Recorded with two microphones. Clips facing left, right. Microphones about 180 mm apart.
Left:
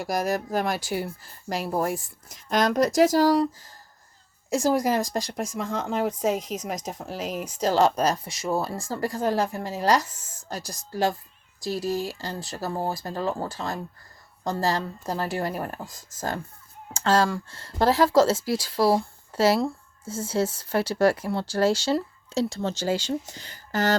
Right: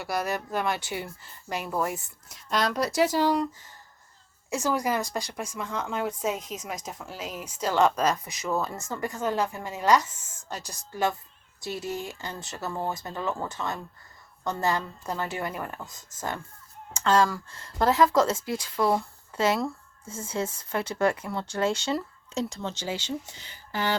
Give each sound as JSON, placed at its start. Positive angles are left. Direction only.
{"t": 0.0, "sound": "speech", "side_deg": 40}
{"t": 2.3, "sound": "speech", "side_deg": 45}